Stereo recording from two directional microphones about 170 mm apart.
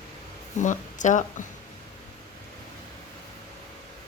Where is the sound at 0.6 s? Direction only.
45° left (ahead or behind).